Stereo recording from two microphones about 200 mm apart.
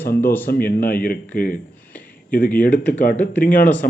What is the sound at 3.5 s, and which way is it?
Speech, 45° left (ahead or behind).